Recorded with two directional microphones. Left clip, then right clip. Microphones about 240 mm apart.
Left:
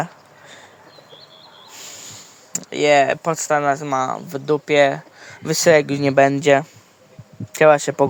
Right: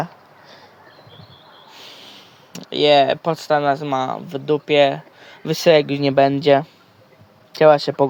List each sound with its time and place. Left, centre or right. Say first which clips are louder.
1.7 s speech: left 2 dB; centre